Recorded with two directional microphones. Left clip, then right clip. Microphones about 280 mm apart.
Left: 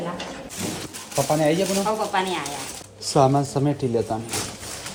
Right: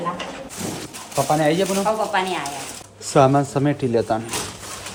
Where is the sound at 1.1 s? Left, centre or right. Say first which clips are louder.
Right 2 dB; centre.